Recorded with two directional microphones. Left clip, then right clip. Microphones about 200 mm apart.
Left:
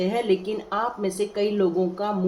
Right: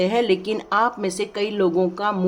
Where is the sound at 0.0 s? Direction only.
50° right (ahead or behind).